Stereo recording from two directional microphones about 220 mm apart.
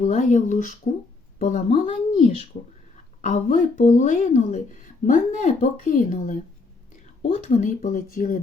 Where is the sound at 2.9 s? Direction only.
35° left (ahead or behind).